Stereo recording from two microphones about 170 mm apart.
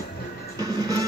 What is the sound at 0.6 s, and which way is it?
Music, 20° right (ahead or behind).